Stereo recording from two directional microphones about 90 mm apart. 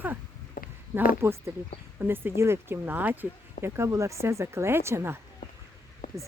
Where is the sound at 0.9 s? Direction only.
30° right (ahead or behind).